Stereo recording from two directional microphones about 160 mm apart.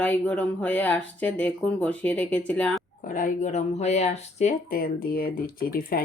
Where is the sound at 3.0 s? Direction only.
55° left (ahead or behind).